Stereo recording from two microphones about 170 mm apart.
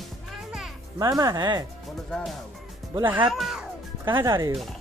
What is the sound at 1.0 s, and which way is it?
Speech, 20° right (ahead or behind).